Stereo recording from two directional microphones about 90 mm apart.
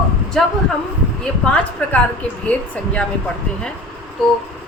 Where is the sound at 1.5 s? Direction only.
10° left (ahead or behind).